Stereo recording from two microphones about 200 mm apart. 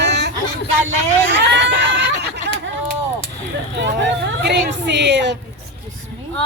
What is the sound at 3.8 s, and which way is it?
Speech, 60° right (ahead or behind).